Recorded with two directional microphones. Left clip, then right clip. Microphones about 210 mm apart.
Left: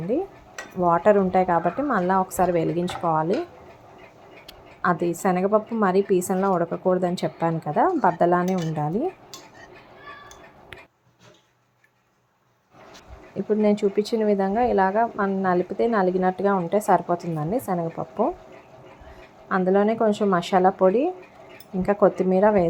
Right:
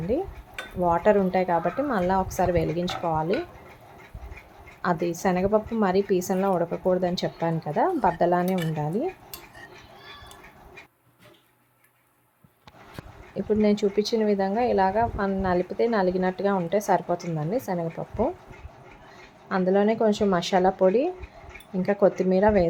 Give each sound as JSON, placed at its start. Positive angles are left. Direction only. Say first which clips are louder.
{"t": 0.1, "sound": "dishes", "louder": "left 2 dB", "side_deg": 10}
{"t": 0.8, "sound": "speech", "louder": "left 3 dB", "side_deg": 10}
{"t": 4.8, "sound": "speech", "louder": "left 3 dB", "side_deg": 10}
{"t": 13.3, "sound": "speech", "louder": "left 2 dB", "side_deg": 10}
{"t": 19.5, "sound": "speech", "louder": "left 2 dB", "side_deg": 10}